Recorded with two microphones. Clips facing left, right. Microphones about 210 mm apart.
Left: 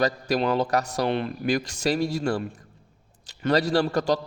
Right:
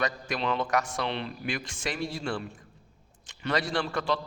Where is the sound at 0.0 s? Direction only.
40° left (ahead or behind).